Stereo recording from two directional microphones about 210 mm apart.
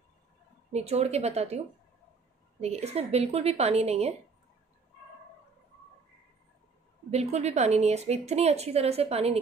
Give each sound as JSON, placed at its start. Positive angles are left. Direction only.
{"t": 0.7, "sound": "a woman's voice", "side_deg": -30}
{"t": 2.6, "sound": "a woman's voice", "side_deg": -30}
{"t": 7.1, "sound": "a woman's voice", "side_deg": -30}